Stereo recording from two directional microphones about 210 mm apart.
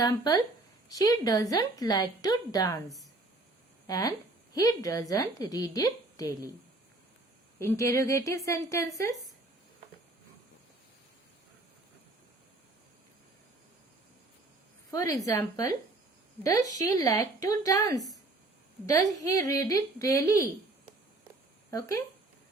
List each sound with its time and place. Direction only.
0.3 s a woman's voice: 20° left (ahead or behind)
3.8 s a woman's voice: 15° left (ahead or behind)
7.6 s a woman's voice: 10° left (ahead or behind)
14.8 s a woman's voice: 15° left (ahead or behind)
21.7 s a woman's voice: 15° left (ahead or behind)